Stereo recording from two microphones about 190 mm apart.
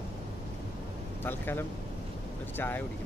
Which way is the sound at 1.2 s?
10° left (ahead or behind).